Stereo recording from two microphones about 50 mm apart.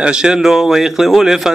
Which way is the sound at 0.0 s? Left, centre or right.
Centre.